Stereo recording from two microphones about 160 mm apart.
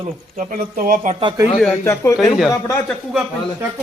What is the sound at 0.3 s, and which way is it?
Speech, 60° right (ahead or behind).